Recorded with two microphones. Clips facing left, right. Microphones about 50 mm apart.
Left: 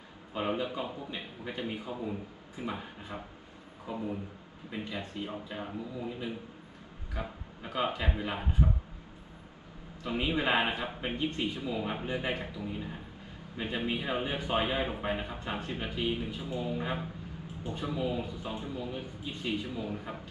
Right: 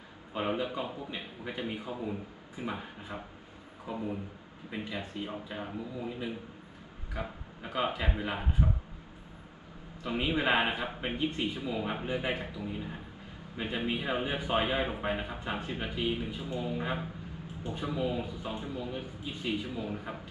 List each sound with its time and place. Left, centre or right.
0.3 s a man's voice: centre
10.0 s a man's voice: centre